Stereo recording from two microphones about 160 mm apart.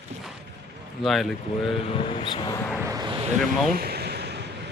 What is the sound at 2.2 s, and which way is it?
Vehicle, 30° left (ahead or behind).